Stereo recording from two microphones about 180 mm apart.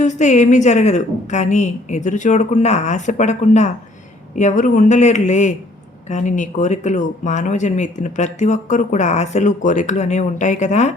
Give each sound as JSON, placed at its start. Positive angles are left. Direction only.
{"t": 0.0, "sound": "speech", "side_deg": 40}